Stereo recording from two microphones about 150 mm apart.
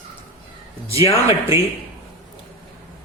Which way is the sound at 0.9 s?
40° left (ahead or behind).